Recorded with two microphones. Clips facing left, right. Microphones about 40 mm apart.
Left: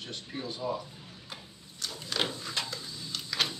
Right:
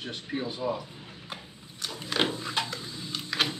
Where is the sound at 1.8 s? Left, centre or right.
Right.